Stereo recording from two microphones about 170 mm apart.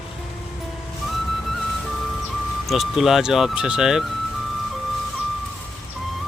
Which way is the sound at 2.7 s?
Centre (ahead or behind).